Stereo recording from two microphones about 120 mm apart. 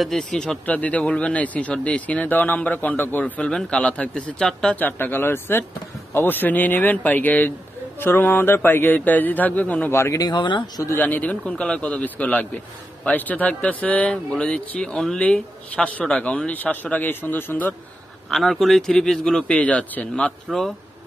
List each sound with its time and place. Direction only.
0.0 s a man's voice: centre (ahead or behind); by 10.6 s 40° left (ahead or behind)
11.0 s speech: 15° left (ahead or behind)
18.3 s a man's voice: centre (ahead or behind)